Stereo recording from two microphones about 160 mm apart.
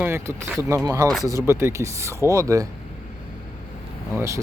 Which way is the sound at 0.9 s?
25° right (ahead or behind).